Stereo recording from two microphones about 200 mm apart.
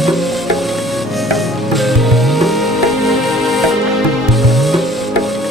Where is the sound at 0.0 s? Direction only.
Centre (ahead or behind).